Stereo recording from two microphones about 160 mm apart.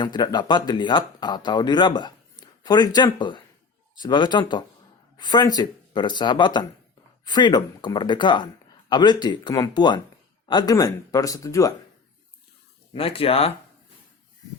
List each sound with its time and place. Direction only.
0.0 s speech: 25° left (ahead or behind)
12.9 s speech: 35° left (ahead or behind)